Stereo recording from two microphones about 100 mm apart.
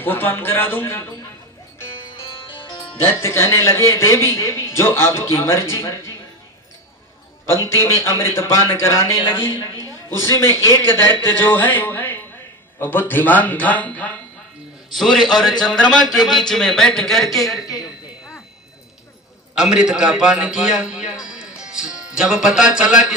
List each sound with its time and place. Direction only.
0.0 s speech: 20° left (ahead or behind)
2.0 s music: 60° left (ahead or behind)
2.9 s speech: 25° left (ahead or behind)
7.4 s speech: 25° left (ahead or behind)
9.2 s a woman's voice: 55° left (ahead or behind)
10.2 s a man's voice: 30° left (ahead or behind)
14.9 s a man's voice: centre (ahead or behind)
17.7 s a sound: 35° left (ahead or behind)
19.5 s a man's voice: 5° right (ahead or behind)